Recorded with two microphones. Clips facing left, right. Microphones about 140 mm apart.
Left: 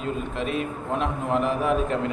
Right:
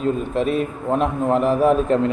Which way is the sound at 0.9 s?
40° right (ahead or behind).